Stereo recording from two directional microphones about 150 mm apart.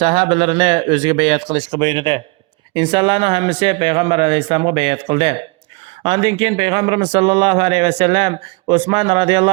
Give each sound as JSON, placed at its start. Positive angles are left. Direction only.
{"t": 0.0, "sound": "a man's voice", "side_deg": -40}